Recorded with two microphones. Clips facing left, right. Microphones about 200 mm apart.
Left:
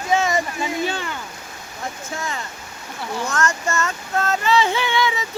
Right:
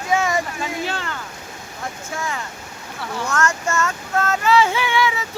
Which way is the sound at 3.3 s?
10° right (ahead or behind).